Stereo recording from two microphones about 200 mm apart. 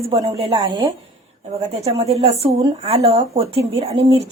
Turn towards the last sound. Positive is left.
turn(degrees=-30)  # may be behind; listen again after turning